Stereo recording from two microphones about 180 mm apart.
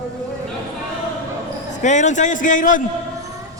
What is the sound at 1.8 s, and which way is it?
A man's voice, 40° left (ahead or behind).